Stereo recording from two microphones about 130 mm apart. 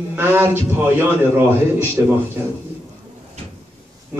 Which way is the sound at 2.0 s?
15° right (ahead or behind).